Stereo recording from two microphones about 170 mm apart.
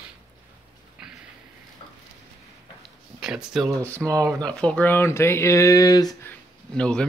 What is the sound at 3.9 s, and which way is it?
Speech, 15° right (ahead or behind).